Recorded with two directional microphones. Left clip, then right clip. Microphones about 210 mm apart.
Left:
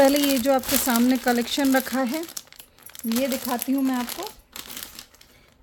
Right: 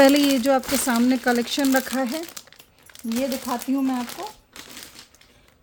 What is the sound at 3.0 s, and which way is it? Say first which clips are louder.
Speech: left 1 dB; 30° left (ahead or behind).